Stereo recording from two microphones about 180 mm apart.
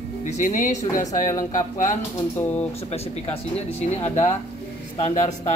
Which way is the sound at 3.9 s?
40° left (ahead or behind).